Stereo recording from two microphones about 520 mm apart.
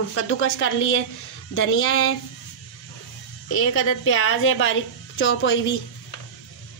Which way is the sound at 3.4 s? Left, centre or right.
Left.